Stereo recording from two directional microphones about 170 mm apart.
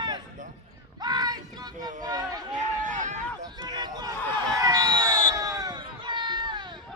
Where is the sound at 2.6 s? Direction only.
45° right (ahead or behind).